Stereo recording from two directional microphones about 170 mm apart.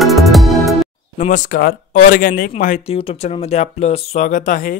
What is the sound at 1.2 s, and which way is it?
Speech, 50° left (ahead or behind).